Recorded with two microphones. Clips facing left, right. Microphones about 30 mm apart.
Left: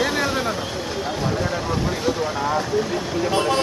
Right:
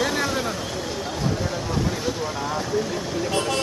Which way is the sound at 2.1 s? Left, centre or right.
Centre.